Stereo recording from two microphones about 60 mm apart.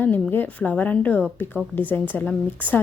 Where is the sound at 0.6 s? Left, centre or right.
Left.